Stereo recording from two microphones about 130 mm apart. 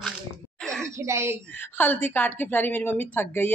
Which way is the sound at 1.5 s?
15° left (ahead or behind).